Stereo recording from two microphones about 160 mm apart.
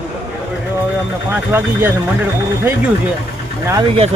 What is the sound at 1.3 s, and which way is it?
Speech, 10° right (ahead or behind).